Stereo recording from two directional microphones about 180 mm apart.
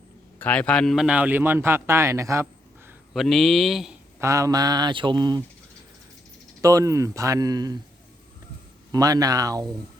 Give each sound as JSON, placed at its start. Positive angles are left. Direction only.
{"t": 0.3, "sound": "a man's voice", "side_deg": 10}
{"t": 3.1, "sound": "speech", "side_deg": 0}
{"t": 4.2, "sound": "speech", "side_deg": -15}
{"t": 6.6, "sound": "a man's voice", "side_deg": -20}
{"t": 8.9, "sound": "speech", "side_deg": -20}